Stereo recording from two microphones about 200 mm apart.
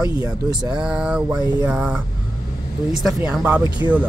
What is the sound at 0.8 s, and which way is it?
Speech, 5° right (ahead or behind).